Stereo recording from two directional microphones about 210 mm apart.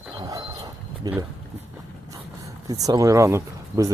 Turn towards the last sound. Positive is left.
turn(degrees=-15)  # may be behind; listen again after turning